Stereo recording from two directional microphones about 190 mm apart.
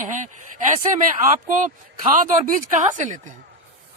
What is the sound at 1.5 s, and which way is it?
Speech, 40° right (ahead or behind).